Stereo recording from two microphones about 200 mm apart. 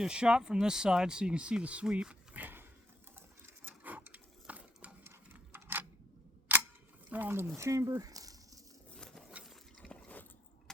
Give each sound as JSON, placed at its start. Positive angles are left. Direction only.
{"t": 0.0, "sound": "speech", "side_deg": -5}
{"t": 3.2, "sound": "sewing machine", "side_deg": -10}
{"t": 6.5, "sound": "camera", "side_deg": -10}
{"t": 7.1, "sound": "speech", "side_deg": -10}
{"t": 9.0, "sound": "a sound", "side_deg": 0}